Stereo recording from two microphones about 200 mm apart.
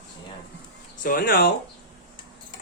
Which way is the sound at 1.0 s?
45° left (ahead or behind).